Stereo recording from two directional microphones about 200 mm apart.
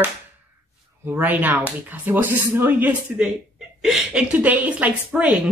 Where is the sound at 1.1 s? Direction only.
10° right (ahead or behind).